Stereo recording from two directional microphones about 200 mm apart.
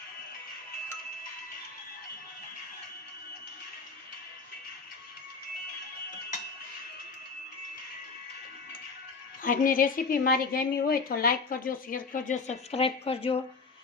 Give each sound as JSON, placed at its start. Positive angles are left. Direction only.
{"t": 9.4, "sound": "a woman's voice", "side_deg": 45}